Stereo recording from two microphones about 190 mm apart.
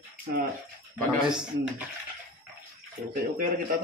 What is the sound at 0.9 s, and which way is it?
Speech, 5° right (ahead or behind).